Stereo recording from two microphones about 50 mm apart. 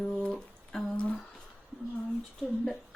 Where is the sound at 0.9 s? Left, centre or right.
Left.